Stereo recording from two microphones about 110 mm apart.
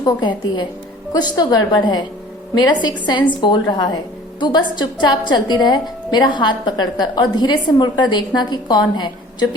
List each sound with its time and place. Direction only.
0.0 s a woman's voice: 40° left (ahead or behind)